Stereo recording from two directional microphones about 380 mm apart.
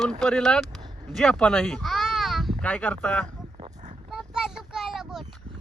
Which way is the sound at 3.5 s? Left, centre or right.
Centre.